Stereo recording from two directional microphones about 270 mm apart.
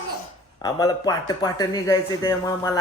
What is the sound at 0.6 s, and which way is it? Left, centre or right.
A man's voice, centre.